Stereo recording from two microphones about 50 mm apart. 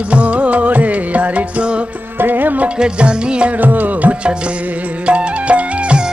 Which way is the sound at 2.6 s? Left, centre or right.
Right.